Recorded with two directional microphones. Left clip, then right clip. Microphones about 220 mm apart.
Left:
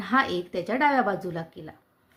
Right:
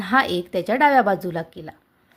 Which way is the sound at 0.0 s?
30° right (ahead or behind).